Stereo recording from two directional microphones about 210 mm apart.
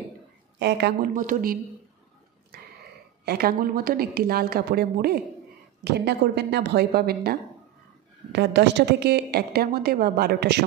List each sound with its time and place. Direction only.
0.6 s a woman's voice: 55° right (ahead or behind)
2.5 s a sound: 50° right (ahead or behind)
3.3 s a woman's voice: 45° right (ahead or behind)